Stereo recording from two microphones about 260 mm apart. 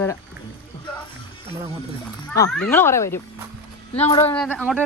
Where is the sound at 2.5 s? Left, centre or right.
Centre.